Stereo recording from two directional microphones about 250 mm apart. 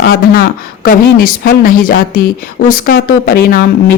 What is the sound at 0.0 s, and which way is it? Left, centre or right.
A man's voice, left.